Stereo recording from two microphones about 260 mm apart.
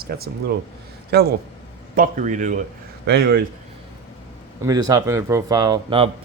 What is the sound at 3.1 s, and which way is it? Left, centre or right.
Speech, right.